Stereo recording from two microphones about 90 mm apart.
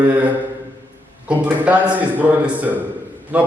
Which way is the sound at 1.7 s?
15° right (ahead or behind).